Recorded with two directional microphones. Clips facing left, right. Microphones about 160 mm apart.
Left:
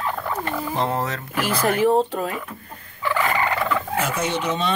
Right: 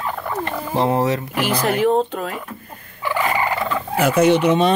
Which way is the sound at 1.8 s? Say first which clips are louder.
Even; 5° left (ahead or behind).